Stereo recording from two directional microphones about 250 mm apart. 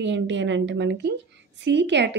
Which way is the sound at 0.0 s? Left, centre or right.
Right.